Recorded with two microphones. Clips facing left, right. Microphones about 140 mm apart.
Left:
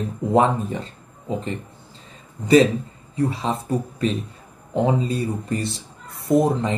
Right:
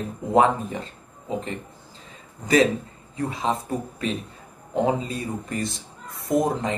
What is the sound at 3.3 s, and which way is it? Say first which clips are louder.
Speech: left 2 dB; 30° left (ahead or behind).